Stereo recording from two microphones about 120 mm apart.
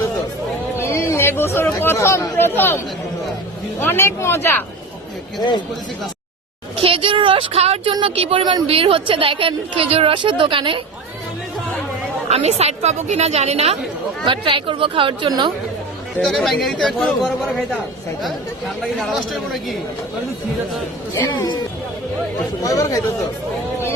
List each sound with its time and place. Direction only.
0.8 s chatter: 20° left (ahead or behind)
2.6 s speech: 15° left (ahead or behind)
5.4 s speech: 40° left (ahead or behind)
6.7 s a woman's voice: 50° right (ahead or behind)
8.6 s a woman's voice: 50° right (ahead or behind)
12.3 s a woman's voice: 65° right (ahead or behind)
14.3 s a woman's voice: 45° right (ahead or behind)
16.2 s speech: centre (ahead or behind)
18.9 s speech: centre (ahead or behind)
21.3 s speech: 40° left (ahead or behind)
22.6 s speech: 30° left (ahead or behind)